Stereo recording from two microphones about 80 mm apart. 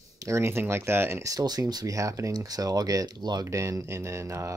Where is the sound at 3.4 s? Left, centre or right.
Right.